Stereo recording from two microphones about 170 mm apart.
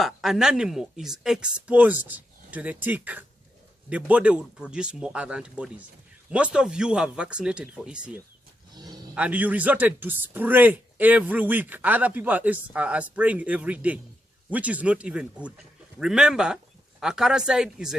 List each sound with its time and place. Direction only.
0.0 s a man's voice: centre (ahead or behind)
8.7 s a sound: 25° right (ahead or behind)
9.1 s a man's voice: 10° right (ahead or behind)